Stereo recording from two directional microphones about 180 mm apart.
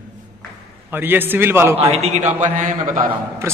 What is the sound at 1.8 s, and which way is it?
A man's voice, 35° right (ahead or behind).